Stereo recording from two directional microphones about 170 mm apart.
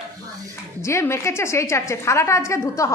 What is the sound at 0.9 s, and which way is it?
A woman's voice, 15° left (ahead or behind).